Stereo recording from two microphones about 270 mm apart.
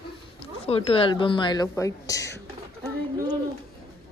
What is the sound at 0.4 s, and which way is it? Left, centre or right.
A woman's voice, left.